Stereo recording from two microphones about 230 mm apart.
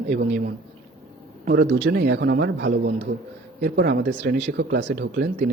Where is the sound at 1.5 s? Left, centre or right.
Right.